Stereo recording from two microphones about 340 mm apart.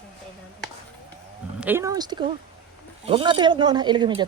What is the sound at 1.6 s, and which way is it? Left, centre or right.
Speech, centre.